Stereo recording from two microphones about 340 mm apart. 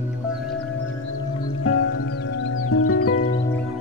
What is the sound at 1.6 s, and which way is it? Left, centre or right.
Music, left.